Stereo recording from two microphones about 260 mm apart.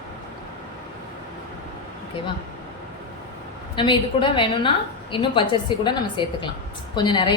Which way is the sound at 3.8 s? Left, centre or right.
Centre.